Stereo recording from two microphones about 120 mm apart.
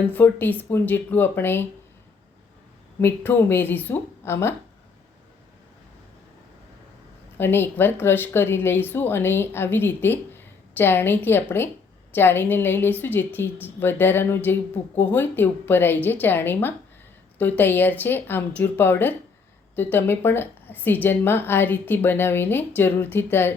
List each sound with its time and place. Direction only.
0.1 s a woman's voice: 15° left (ahead or behind)
3.0 s speech: 20° left (ahead or behind)
7.3 s a woman's voice: 20° left (ahead or behind)